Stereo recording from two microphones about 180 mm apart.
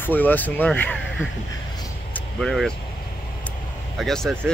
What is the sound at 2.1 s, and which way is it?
Vehicle, centre (ahead or behind).